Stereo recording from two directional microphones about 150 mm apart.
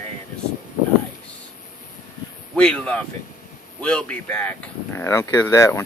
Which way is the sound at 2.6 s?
5° left (ahead or behind).